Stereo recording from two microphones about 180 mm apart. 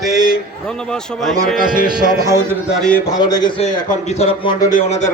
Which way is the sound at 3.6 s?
40° left (ahead or behind).